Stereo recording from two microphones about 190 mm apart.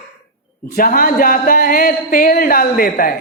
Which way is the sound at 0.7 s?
50° left (ahead or behind).